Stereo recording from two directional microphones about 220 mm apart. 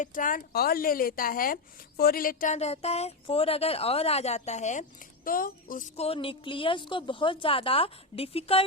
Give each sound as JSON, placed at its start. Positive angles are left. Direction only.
{"t": 0.0, "sound": "a woman's voice", "side_deg": 35}